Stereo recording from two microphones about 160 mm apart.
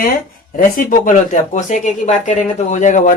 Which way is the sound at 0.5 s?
55° left (ahead or behind).